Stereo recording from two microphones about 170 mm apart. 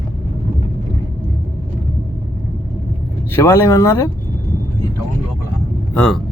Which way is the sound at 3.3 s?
15° left (ahead or behind).